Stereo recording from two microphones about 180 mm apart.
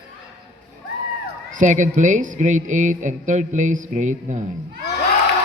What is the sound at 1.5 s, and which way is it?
Speech, 45° right (ahead or behind).